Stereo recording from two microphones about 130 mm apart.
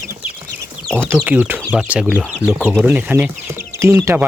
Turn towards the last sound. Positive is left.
turn(degrees=-20)  # may be behind; listen again after turning